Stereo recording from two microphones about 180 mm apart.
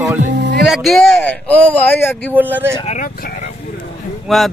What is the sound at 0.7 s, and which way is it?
Speech, centre (ahead or behind).